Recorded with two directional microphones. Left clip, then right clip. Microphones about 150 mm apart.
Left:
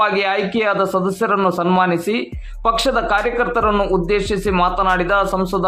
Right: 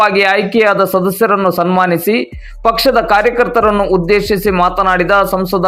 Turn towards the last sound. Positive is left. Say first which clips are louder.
# right 5 dB
turn(degrees=-25)  # may be behind; listen again after turning